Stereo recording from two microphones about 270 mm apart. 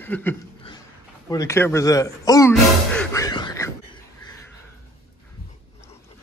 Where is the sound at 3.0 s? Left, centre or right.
Centre.